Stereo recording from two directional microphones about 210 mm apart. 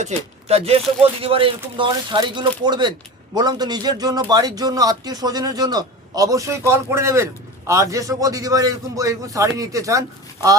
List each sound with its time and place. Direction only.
0.0 s a man's voice: 30° right (ahead or behind); by 10.0 s 15° right (ahead or behind)